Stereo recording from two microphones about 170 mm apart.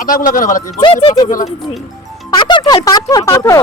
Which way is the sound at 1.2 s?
50° left (ahead or behind).